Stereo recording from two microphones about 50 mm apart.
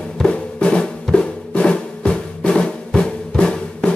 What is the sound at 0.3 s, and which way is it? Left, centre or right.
Drum, left.